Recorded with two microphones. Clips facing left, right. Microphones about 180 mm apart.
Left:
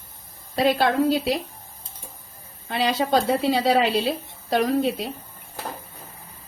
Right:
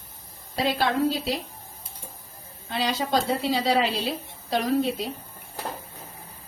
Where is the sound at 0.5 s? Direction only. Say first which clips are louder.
Left 5 dB; 55° left (ahead or behind).